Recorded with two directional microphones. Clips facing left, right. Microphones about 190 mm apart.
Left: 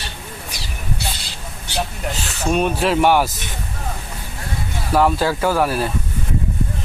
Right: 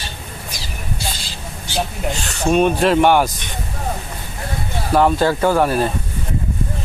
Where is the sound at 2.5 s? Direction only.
Centre (ahead or behind).